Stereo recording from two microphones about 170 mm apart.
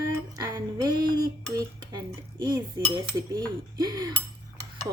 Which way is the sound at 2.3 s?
25° right (ahead or behind).